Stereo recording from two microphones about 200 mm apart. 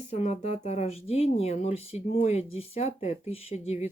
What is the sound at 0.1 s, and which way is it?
Speech, 35° left (ahead or behind).